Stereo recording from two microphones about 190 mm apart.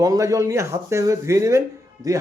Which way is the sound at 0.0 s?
20° right (ahead or behind).